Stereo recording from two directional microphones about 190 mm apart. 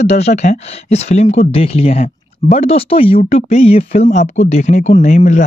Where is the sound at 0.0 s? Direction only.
35° left (ahead or behind).